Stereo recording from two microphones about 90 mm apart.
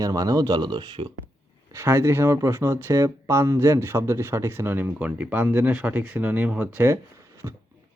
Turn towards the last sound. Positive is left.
turn(degrees=-30)  # may be behind; listen again after turning